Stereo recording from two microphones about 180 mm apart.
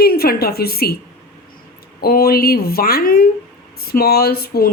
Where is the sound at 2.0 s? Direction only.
55° left (ahead or behind).